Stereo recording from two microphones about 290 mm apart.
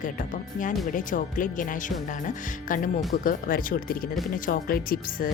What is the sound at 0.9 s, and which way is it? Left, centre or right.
A woman's voice, left.